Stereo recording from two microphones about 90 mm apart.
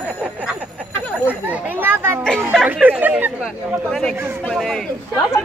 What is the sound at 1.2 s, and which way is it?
Children playing, 20° right (ahead or behind).